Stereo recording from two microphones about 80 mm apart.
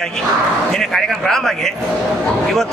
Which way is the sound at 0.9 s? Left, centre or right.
Centre.